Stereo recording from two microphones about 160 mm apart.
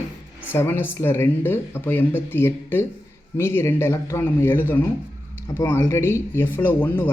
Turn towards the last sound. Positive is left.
turn(degrees=10)  # may be behind; listen again after turning